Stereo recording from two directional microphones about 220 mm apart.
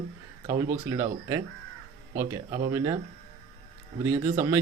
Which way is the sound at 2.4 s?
20° right (ahead or behind).